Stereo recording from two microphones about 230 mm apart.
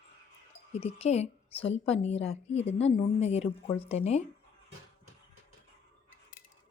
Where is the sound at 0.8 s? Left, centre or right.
Left.